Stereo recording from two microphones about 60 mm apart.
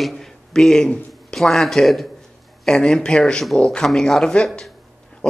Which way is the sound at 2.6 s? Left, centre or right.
Centre.